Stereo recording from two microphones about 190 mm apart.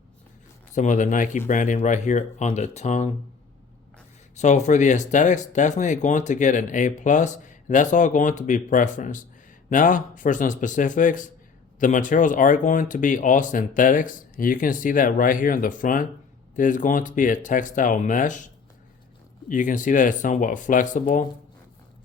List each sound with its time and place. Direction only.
0.7 s speech: 40° left (ahead or behind)
4.4 s speech: 40° left (ahead or behind)
19.5 s speech: 45° left (ahead or behind)